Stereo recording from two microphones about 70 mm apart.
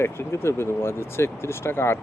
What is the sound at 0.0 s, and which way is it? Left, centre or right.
Speech, left.